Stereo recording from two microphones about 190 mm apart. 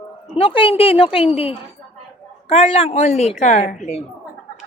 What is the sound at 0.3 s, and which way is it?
A woman's voice, 30° left (ahead or behind).